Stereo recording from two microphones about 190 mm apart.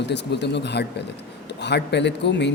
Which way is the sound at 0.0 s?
65° left (ahead or behind).